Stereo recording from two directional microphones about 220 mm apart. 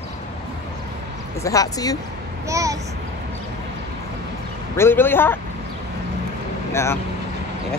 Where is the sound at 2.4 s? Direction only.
15° right (ahead or behind).